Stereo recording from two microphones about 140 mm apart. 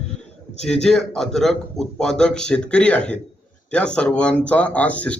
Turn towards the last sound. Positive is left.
turn(degrees=10)  # may be behind; listen again after turning